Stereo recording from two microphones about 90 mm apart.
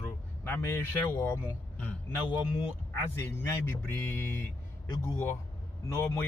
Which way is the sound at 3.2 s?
30° left (ahead or behind).